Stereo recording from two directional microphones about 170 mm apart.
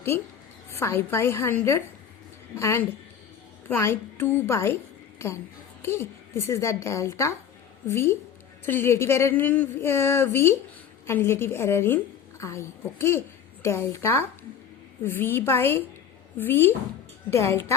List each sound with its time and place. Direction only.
0.1 s speech: 15° left (ahead or behind)
5.8 s a woman's voice: 15° left (ahead or behind)